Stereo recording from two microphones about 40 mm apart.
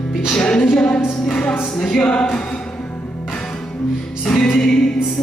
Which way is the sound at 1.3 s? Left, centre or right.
Left.